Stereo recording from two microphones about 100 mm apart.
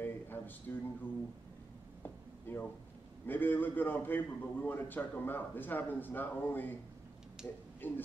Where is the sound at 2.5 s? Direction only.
20° left (ahead or behind).